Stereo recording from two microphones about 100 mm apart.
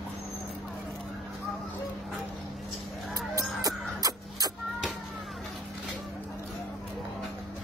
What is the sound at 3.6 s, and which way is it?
Cough, 40° right (ahead or behind).